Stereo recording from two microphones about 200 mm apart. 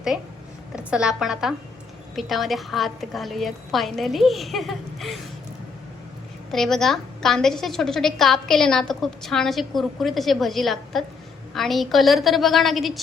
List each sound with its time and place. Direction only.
0.9 s a woman's voice: 5° right (ahead or behind)
6.5 s a woman's voice: centre (ahead or behind)